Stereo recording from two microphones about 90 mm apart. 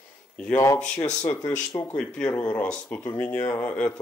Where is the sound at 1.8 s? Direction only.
15° left (ahead or behind).